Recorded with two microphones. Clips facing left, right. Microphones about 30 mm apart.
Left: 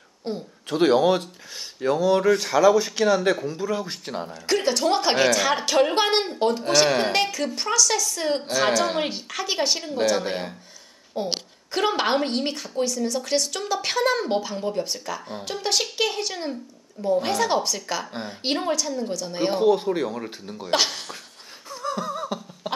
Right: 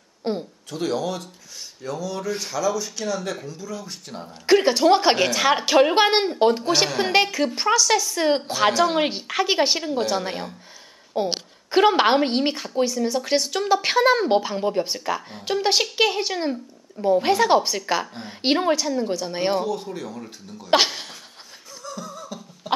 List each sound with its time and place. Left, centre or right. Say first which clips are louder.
0.2 s a sound: right 4 dB; right
0.7 s speech: left 8 dB; left
4.3 s a woman's voice: right 6 dB; centre
9.8 s a woman's voice: left 1 dB; centre
19.6 s speech: left 8 dB; left
20.7 s a woman's voice: right 4 dB; centre
21.6 s a sound: left 7 dB; left